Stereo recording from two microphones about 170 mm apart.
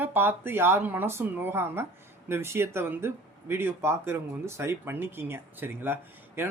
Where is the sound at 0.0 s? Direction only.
10° right (ahead or behind).